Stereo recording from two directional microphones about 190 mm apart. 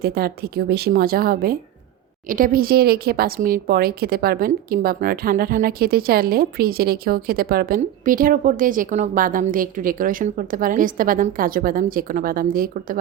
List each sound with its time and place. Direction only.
0.0 s speech: 55° right (ahead or behind)